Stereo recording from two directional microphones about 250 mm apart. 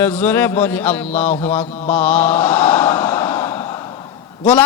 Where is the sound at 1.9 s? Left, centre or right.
Centre.